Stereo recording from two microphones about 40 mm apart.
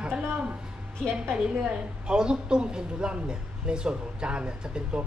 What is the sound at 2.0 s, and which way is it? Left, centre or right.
A man's voice, right.